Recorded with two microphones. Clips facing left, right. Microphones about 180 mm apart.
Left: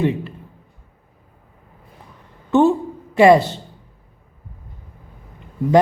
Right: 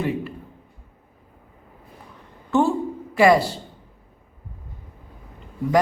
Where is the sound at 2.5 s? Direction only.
20° left (ahead or behind).